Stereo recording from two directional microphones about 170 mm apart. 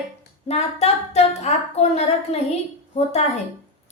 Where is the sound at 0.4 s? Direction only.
40° left (ahead or behind).